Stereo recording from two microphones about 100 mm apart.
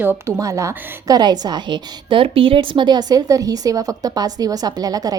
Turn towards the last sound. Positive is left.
turn(degrees=-40)  # may be behind; listen again after turning